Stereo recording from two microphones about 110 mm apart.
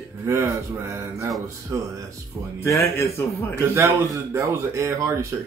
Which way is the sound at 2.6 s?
25° left (ahead or behind).